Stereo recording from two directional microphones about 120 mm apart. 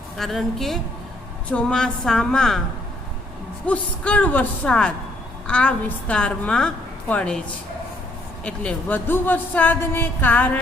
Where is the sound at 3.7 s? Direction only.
10° left (ahead or behind).